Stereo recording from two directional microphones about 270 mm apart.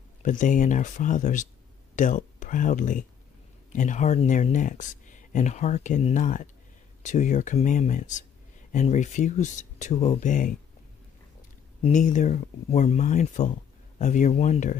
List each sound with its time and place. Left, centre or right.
0.2 s speech: left
11.8 s speech: left